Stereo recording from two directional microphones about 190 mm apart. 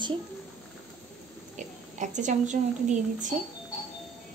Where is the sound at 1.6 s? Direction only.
40° right (ahead or behind).